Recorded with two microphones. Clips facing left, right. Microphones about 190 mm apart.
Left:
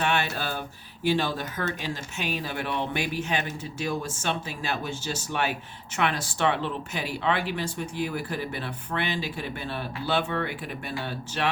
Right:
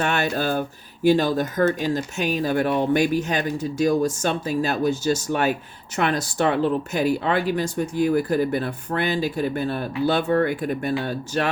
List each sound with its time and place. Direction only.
0.0 s speech: 45° right (ahead or behind)